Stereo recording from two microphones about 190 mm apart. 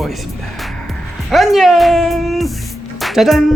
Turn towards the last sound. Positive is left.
turn(degrees=0)  # may be behind; listen again after turning